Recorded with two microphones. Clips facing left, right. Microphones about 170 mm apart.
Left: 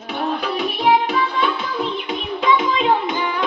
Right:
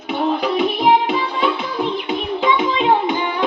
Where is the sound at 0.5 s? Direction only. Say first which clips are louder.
Right 1 dB; 25° right (ahead or behind).